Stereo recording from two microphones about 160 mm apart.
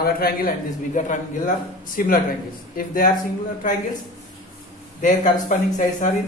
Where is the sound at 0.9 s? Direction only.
55° left (ahead or behind).